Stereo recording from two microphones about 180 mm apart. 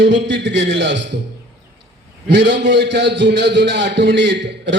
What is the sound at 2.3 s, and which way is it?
A man's voice, 70° right (ahead or behind).